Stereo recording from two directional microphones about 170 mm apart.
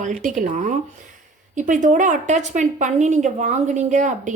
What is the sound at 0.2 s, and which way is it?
A woman's voice, 50° right (ahead or behind).